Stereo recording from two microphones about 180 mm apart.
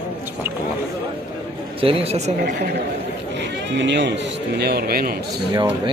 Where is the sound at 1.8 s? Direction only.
35° right (ahead or behind).